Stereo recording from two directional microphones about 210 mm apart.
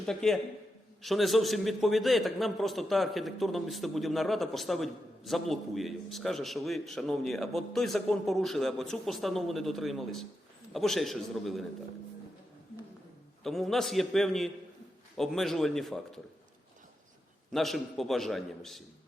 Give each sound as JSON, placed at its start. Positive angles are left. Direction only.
{"t": 0.0, "sound": "a man's voice", "side_deg": 0}
{"t": 13.4, "sound": "a man's voice", "side_deg": 0}
{"t": 17.5, "sound": "a man's voice", "side_deg": 0}